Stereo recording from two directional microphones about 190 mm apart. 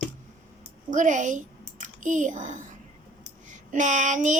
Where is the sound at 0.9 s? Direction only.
40° right (ahead or behind).